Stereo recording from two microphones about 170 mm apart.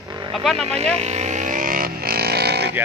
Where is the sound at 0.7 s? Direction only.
40° right (ahead or behind); by 2.7 s 75° right (ahead or behind).